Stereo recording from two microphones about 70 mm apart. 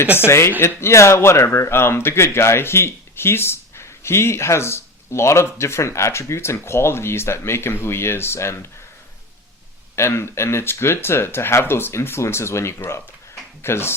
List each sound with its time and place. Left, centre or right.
0.3 s speech: left
9.9 s speech: left